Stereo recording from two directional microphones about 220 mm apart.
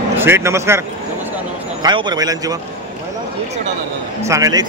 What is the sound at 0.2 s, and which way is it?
A man's voice, 10° right (ahead or behind).